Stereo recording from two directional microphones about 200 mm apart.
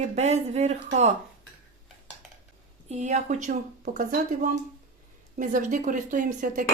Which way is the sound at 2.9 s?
35° right (ahead or behind).